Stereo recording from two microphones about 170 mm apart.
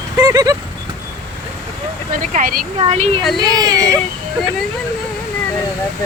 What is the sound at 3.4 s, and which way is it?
Speech, 25° right (ahead or behind).